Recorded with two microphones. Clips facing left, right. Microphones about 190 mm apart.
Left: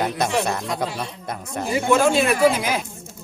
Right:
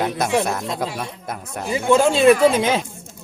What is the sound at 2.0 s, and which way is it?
Speech, 25° right (ahead or behind).